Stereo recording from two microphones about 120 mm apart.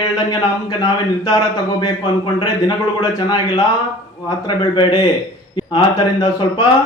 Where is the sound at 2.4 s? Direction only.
30° left (ahead or behind).